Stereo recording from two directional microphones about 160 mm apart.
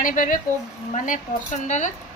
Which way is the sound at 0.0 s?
60° left (ahead or behind).